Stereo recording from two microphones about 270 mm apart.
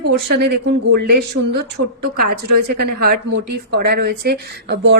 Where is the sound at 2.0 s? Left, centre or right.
Right.